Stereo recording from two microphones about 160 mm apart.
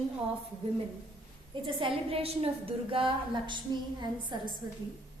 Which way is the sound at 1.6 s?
35° right (ahead or behind).